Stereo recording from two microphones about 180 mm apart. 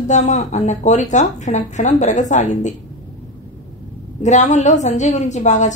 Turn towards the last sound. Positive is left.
turn(degrees=40)  # may be behind; listen again after turning